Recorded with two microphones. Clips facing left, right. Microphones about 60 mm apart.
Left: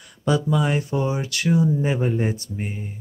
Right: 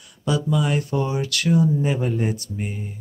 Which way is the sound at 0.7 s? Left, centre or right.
Left.